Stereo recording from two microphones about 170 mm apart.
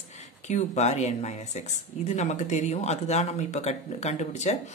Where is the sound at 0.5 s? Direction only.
40° left (ahead or behind).